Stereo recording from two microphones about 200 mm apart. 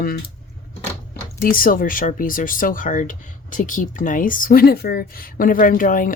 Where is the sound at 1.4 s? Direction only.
45° left (ahead or behind).